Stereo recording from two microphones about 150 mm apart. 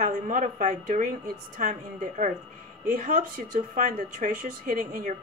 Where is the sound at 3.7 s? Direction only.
65° right (ahead or behind).